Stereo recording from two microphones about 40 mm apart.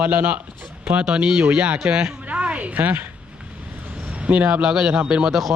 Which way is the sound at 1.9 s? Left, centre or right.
Centre.